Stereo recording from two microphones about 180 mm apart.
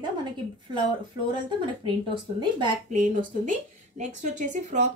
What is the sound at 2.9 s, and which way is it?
A woman's voice, 45° right (ahead or behind).